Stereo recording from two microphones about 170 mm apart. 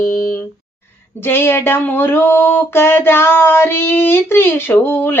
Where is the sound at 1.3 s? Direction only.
15° left (ahead or behind).